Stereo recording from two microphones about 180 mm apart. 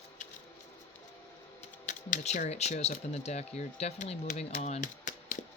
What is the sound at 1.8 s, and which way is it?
Speech, 45° left (ahead or behind).